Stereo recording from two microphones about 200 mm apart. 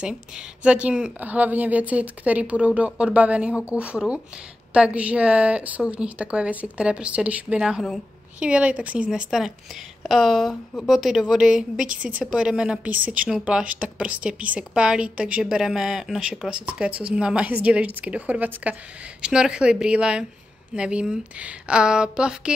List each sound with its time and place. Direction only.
0.0 s a woman's voice: 5° right (ahead or behind)